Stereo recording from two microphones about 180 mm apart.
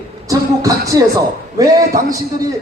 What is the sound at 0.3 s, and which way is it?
Speech, 20° right (ahead or behind).